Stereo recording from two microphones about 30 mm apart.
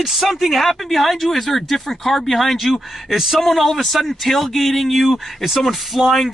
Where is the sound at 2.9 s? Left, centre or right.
Centre.